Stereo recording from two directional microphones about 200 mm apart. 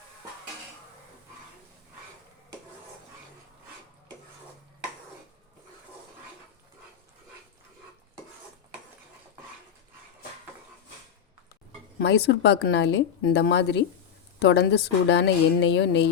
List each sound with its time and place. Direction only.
11.9 s a woman's voice: 55° left (ahead or behind)